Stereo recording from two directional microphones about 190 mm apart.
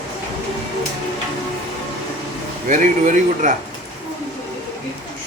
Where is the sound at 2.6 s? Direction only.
40° right (ahead or behind).